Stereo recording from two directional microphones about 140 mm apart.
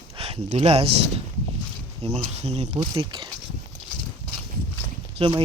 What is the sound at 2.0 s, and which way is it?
Speech, 45° right (ahead or behind).